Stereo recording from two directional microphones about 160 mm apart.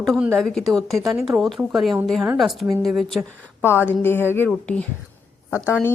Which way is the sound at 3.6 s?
15° left (ahead or behind).